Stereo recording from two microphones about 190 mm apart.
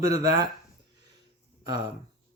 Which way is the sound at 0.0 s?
20° right (ahead or behind).